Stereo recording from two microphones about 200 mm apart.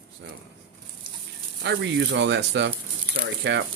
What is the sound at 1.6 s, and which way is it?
Speech, 60° right (ahead or behind).